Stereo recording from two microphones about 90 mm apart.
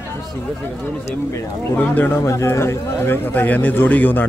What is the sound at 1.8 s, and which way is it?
A man's voice, 20° left (ahead or behind).